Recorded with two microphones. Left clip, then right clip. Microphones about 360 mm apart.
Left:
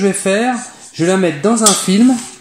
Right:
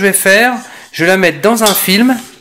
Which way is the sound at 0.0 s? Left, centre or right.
Right.